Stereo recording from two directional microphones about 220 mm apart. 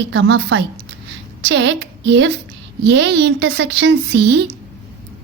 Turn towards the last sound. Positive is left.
turn(degrees=-50)  # may be behind; listen again after turning